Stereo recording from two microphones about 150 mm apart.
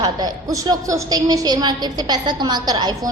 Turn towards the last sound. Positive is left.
turn(degrees=-30)  # may be behind; listen again after turning